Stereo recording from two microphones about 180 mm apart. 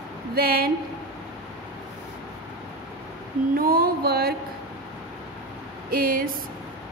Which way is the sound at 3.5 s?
55° right (ahead or behind).